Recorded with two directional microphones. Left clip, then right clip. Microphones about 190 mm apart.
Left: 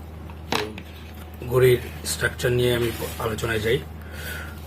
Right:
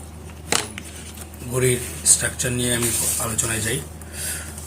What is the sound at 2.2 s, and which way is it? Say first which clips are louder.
Speech: left 3 dB; 50° left (ahead or behind).